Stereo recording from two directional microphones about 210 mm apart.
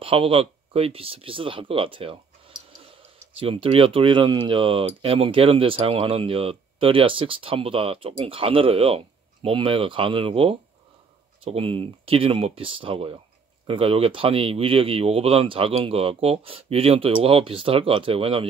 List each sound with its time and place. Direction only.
0.0 s speech: 25° right (ahead or behind)